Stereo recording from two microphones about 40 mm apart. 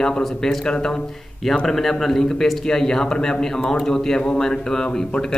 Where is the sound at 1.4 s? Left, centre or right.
Centre.